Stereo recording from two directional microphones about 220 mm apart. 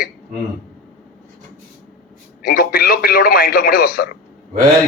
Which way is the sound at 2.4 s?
45° left (ahead or behind).